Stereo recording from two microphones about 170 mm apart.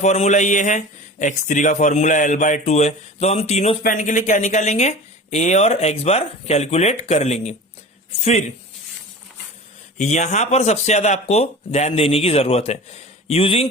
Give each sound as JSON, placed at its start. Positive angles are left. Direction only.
{"t": 0.0, "sound": "a man's voice", "side_deg": 40}
{"t": 10.0, "sound": "speech", "side_deg": 45}